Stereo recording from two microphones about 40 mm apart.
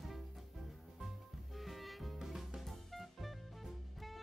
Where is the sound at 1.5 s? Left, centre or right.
Centre.